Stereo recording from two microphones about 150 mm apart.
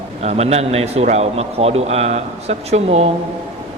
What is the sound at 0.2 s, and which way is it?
A man's voice, 45° right (ahead or behind).